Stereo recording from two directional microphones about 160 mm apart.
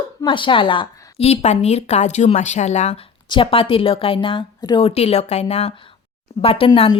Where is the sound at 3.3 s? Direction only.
35° left (ahead or behind).